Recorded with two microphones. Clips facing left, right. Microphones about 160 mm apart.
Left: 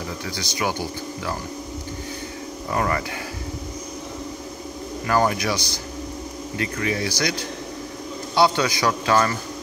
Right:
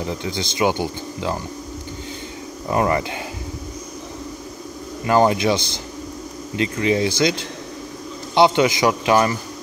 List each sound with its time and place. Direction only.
0.2 s speech: 20° right (ahead or behind)
2.7 s speech: 20° right (ahead or behind)
5.0 s speech: 20° right (ahead or behind)